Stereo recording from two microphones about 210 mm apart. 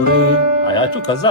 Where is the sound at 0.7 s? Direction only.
20° left (ahead or behind).